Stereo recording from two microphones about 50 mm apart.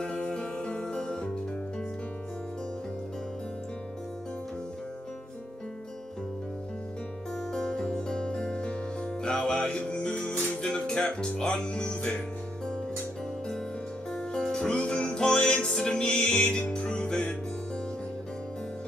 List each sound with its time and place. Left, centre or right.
0.0 s music: centre
7.5 s music: centre
10.6 s speech: centre
14.1 s music: centre